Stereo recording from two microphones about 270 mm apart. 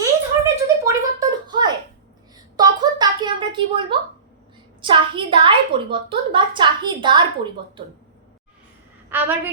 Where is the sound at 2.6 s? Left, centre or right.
Centre.